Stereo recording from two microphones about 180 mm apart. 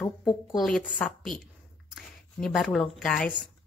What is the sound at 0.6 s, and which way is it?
Speech, centre (ahead or behind).